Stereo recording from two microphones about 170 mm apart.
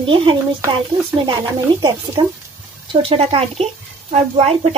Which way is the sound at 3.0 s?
35° right (ahead or behind).